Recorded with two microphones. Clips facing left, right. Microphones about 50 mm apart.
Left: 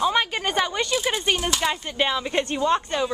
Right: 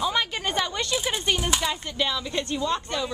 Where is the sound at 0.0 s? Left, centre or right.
Centre.